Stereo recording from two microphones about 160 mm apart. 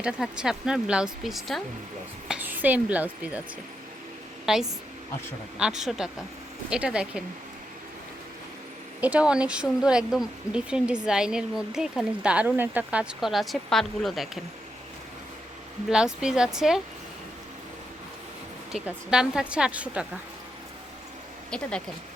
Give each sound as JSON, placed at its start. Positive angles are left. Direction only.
{"t": 0.0, "sound": "speech", "side_deg": -5}
{"t": 4.5, "sound": "speech", "side_deg": -5}
{"t": 9.0, "sound": "speech", "side_deg": -10}
{"t": 15.9, "sound": "speech", "side_deg": -5}
{"t": 18.7, "sound": "speech", "side_deg": -5}